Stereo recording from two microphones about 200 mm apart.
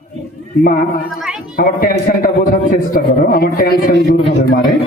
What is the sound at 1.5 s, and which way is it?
A man's voice, 45° left (ahead or behind).